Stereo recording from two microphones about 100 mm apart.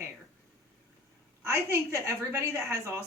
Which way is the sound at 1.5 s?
30° right (ahead or behind).